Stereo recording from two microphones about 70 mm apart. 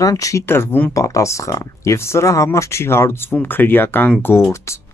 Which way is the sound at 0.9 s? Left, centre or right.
Left.